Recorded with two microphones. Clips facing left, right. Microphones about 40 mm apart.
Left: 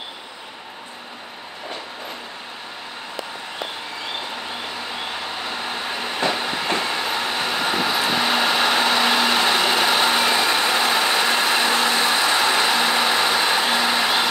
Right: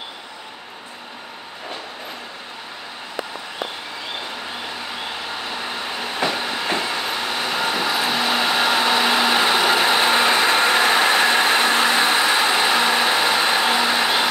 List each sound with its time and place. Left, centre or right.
5.4 s train: centre
10.1 s vehicle: right
11.6 s vehicle: right; by 14.3 s centre